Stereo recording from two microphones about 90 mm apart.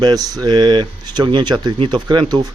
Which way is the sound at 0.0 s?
50° right (ahead or behind).